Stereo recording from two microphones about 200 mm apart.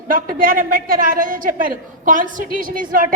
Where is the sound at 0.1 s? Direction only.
45° right (ahead or behind).